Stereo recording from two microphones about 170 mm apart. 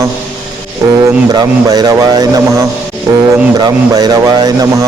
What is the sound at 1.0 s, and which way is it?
A man's voice, 25° right (ahead or behind).